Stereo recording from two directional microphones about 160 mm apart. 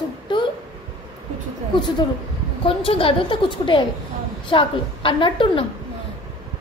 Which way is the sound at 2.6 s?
35° left (ahead or behind).